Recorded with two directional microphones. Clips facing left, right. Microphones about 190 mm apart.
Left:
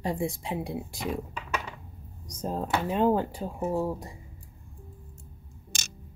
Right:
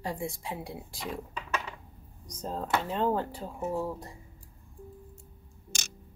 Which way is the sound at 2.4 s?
15° left (ahead or behind).